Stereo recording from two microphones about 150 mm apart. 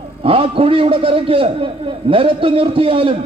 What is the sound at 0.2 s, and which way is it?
A man's voice, 40° right (ahead or behind).